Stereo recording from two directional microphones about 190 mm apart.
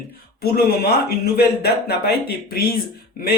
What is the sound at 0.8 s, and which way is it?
Speech, 55° left (ahead or behind).